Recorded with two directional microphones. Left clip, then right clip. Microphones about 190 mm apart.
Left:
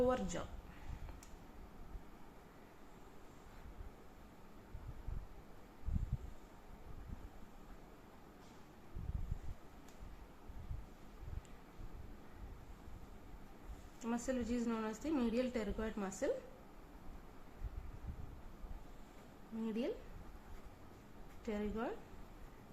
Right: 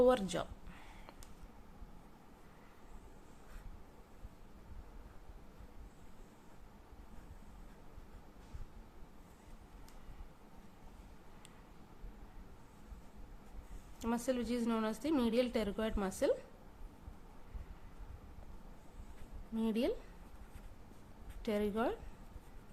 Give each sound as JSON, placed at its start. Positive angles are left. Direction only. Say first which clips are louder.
{"t": 0.1, "sound": "a woman's voice", "louder": "right 6 dB", "side_deg": -65}
{"t": 14.0, "sound": "a woman's voice", "louder": "right 4 dB", "side_deg": -60}
{"t": 19.6, "sound": "a woman's voice", "louder": "right 6 dB", "side_deg": -65}
{"t": 21.4, "sound": "a woman's voice", "louder": "right 6 dB", "side_deg": -65}